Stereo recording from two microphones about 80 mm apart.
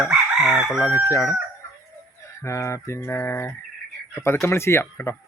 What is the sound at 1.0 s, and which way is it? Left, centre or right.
Speech, left.